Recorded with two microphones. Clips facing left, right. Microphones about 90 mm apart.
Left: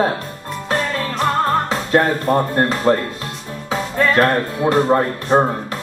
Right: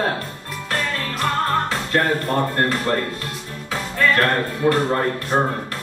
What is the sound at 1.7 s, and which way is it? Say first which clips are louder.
Speech: left 4 dB; 20° left (ahead or behind).